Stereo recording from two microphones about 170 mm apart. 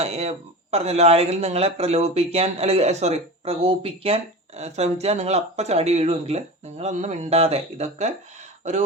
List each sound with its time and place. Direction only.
0.0 s speech: 40° right (ahead or behind)